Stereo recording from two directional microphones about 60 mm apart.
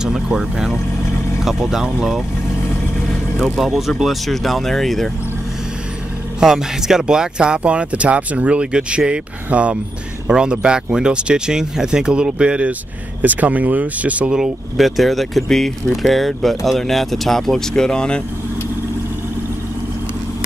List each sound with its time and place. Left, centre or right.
0.0 s vehicle: centre
1.4 s speech: centre
3.3 s speech: centre
6.4 s speech: centre
14.3 s speech: centre